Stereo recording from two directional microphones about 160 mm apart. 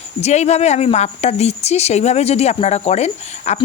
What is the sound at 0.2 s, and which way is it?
Speech, 45° left (ahead or behind).